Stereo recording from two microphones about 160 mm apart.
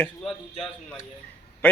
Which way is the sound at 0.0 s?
Centre (ahead or behind).